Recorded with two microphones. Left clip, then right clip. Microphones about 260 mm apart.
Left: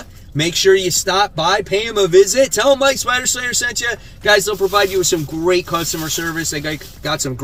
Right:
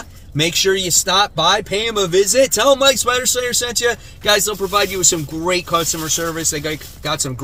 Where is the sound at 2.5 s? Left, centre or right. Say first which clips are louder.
Even; centre.